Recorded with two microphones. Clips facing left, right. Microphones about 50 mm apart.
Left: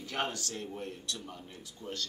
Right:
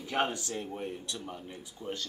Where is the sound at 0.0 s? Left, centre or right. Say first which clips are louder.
Right 4 dB; centre.